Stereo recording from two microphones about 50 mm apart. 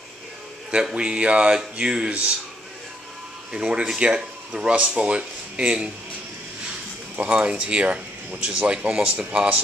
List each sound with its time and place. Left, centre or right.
0.9 s speech: centre
3.5 s speech: centre
7.2 s speech: right